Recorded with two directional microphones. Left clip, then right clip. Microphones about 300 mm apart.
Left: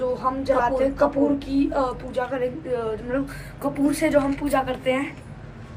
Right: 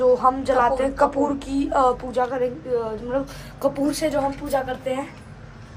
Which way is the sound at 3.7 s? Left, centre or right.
Centre.